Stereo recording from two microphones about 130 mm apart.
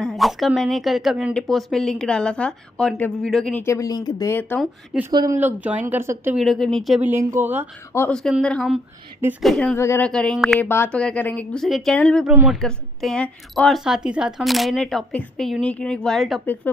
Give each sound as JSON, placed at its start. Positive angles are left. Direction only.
{"t": 0.0, "sound": "a sound", "side_deg": 0}
{"t": 0.6, "sound": "speech", "side_deg": 0}
{"t": 3.5, "sound": "speech", "side_deg": 20}
{"t": 4.3, "sound": "speech", "side_deg": 15}
{"t": 5.1, "sound": "speech", "side_deg": -30}
{"t": 5.4, "sound": "speech", "side_deg": -10}
{"t": 6.3, "sound": "speech", "side_deg": 0}
{"t": 7.0, "sound": "speech", "side_deg": -20}
{"t": 8.1, "sound": "speech", "side_deg": 5}
{"t": 9.8, "sound": "speech", "side_deg": 20}
{"t": 10.0, "sound": "speech", "side_deg": 5}
{"t": 10.6, "sound": "speech", "side_deg": 15}
{"t": 12.3, "sound": "speech", "side_deg": -5}
{"t": 12.5, "sound": "speech", "side_deg": 5}